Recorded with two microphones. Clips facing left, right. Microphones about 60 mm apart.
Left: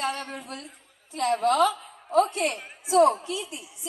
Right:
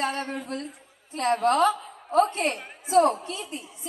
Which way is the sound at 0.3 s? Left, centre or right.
Right.